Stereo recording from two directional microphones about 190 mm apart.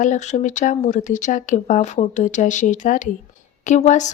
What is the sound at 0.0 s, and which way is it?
A woman's voice, 40° left (ahead or behind).